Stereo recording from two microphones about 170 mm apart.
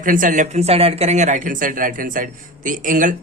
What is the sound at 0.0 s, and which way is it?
Speech, 50° right (ahead or behind).